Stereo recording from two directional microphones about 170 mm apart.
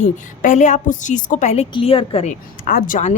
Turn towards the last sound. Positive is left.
turn(degrees=50)  # may be behind; listen again after turning